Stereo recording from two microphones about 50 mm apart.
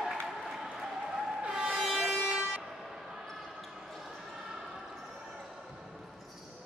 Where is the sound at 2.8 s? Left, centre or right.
Centre.